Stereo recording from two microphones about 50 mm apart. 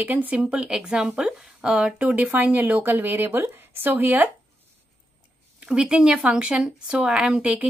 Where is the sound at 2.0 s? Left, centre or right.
Right.